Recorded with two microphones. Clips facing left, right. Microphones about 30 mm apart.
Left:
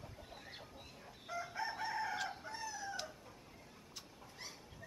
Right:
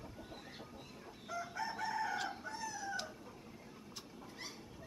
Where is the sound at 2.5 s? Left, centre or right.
Left.